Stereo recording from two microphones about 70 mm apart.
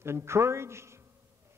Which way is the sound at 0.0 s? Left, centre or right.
Right.